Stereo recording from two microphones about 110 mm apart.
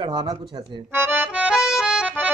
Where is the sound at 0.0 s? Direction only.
40° right (ahead or behind).